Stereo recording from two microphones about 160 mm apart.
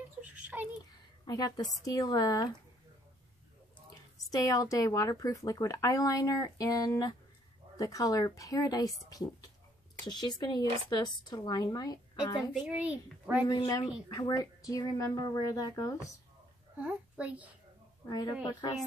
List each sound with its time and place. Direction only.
0.2 s a sound: 10° right (ahead or behind)
1.2 s speech: 25° left (ahead or behind)
4.3 s speech: 20° left (ahead or behind)
12.5 s a child's voice: 5° right (ahead or behind)
13.5 s speech: 25° left (ahead or behind)
16.8 s a child's voice: 10° right (ahead or behind)
18.0 s speech: 20° left (ahead or behind)